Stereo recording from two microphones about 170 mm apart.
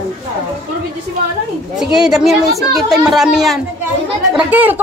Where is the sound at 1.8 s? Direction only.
5° right (ahead or behind).